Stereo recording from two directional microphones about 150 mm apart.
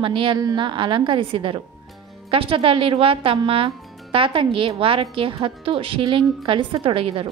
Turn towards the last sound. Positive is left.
turn(degrees=-40)  # may be behind; listen again after turning